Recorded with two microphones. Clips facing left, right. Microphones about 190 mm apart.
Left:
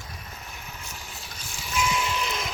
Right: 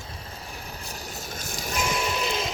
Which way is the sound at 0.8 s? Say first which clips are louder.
Right 5 dB; 35° right (ahead or behind).